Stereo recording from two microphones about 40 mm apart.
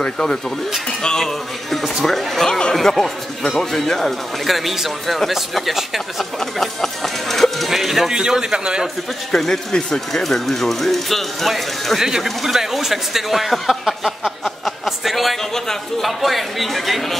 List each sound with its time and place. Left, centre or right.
0.0 s speech: left
1.0 s speech: centre
4.5 s speech: centre
8.1 s a man's voice: centre
9.5 s speech: centre
9.9 s speech: centre
15.5 s speech: centre
16.1 s speech: centre